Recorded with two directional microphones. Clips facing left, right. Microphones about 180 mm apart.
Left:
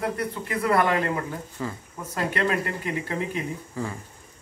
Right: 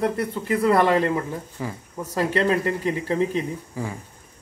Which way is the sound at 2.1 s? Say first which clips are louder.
Right 4 dB; 30° right (ahead or behind).